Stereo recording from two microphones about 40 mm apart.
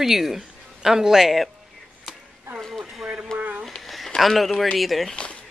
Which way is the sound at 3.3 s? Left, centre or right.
Centre.